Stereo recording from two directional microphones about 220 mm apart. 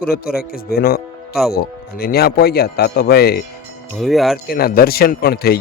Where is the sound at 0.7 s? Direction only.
45° left (ahead or behind).